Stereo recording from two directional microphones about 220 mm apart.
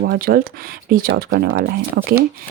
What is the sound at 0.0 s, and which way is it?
Speech, 45° right (ahead or behind).